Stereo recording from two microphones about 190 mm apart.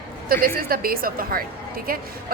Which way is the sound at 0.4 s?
50° right (ahead or behind).